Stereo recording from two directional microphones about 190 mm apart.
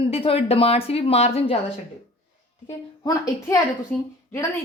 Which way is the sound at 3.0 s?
20° left (ahead or behind).